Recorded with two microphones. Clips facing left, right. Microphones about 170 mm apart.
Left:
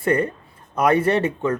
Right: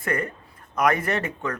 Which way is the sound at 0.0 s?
30° left (ahead or behind).